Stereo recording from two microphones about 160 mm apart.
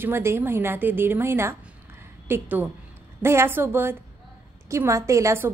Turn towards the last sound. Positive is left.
turn(degrees=-15)  # may be behind; listen again after turning